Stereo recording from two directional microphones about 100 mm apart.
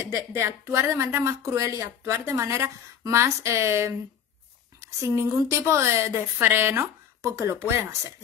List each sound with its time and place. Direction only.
0.1 s a woman's voice: 30° right (ahead or behind)